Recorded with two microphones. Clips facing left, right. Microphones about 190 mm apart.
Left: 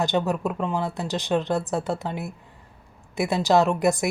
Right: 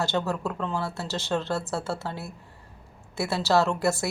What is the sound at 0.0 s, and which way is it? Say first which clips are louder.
A woman's voice: left 4 dB; 15° left (ahead or behind).